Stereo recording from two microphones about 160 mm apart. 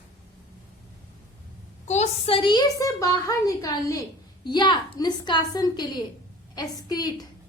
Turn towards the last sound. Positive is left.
turn(degrees=25)  # may be behind; listen again after turning